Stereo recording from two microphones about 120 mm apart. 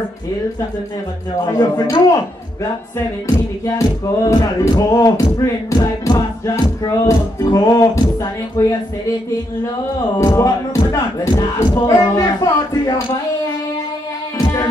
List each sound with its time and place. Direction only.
1.4 s speech: 35° left (ahead or behind)
3.6 s music: 30° left (ahead or behind)
10.1 s music: 25° left (ahead or behind)
12.2 s speech: 30° left (ahead or behind)
14.4 s music: 40° left (ahead or behind)